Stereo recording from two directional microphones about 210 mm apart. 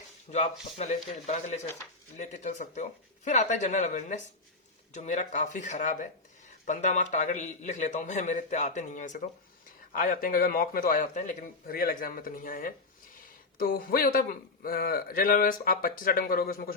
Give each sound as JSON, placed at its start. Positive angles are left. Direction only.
{"t": 0.3, "sound": "a man's voice", "side_deg": 30}